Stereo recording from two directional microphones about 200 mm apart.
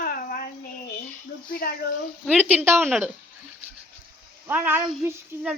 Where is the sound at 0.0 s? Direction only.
45° left (ahead or behind).